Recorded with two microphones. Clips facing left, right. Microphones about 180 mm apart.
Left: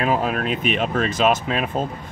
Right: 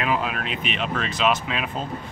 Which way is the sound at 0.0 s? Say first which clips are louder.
Left 4 dB; 40° left (ahead or behind).